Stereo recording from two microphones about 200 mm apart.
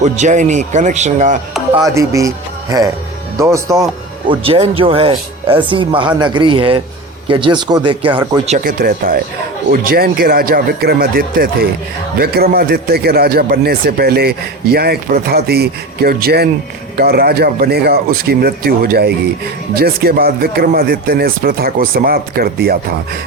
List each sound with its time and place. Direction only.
0.0 s speech: 35° right (ahead or behind)
1.7 s speech: 15° right (ahead or behind)
4.3 s speech: 30° right (ahead or behind)
8.4 s a man's voice: 40° right (ahead or behind)